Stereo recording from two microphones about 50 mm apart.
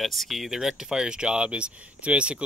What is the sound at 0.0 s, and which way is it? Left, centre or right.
Speech, centre.